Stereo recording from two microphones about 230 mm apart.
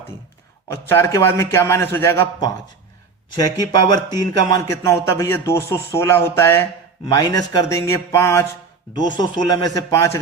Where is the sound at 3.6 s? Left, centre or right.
Centre.